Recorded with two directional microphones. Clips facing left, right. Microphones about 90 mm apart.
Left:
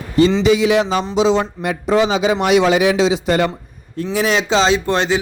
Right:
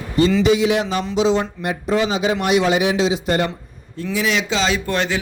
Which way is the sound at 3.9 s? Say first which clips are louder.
Left 3 dB; 50° left (ahead or behind).